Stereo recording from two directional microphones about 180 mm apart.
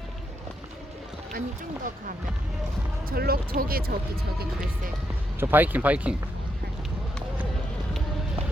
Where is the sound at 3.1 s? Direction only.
60° right (ahead or behind).